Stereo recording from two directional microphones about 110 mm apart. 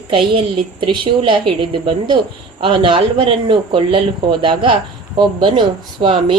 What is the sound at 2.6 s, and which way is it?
A woman's voice, 50° right (ahead or behind).